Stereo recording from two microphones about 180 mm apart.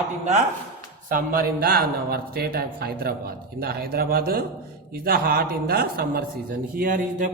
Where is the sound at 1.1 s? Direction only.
55° right (ahead or behind).